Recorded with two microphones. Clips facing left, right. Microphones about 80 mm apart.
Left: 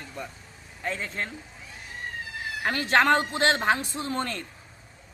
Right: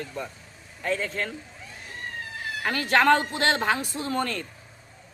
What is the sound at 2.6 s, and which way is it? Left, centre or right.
Speech, left.